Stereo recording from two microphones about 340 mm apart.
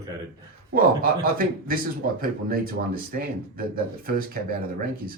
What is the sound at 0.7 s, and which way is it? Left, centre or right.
A man's voice, right.